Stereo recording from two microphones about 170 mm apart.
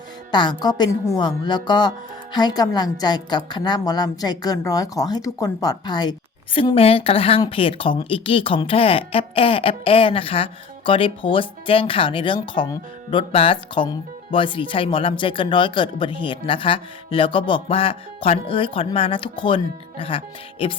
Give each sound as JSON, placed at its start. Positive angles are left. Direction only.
{"t": 0.3, "sound": "speech", "side_deg": 25}